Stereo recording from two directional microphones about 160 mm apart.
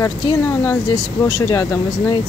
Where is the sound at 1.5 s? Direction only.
20° left (ahead or behind).